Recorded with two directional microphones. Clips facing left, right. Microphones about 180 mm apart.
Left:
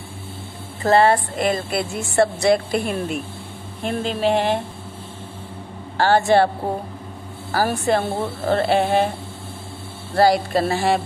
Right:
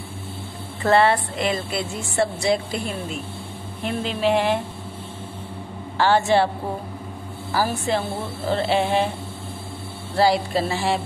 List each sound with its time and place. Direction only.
0.8 s a woman's voice: 40° left (ahead or behind)
3.8 s a woman's voice: 45° left (ahead or behind)
5.9 s a woman's voice: 45° left (ahead or behind)
7.5 s a woman's voice: 55° left (ahead or behind)
10.1 s a woman's voice: 45° left (ahead or behind)